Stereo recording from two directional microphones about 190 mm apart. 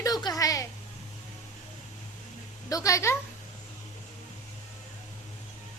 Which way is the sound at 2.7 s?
20° left (ahead or behind).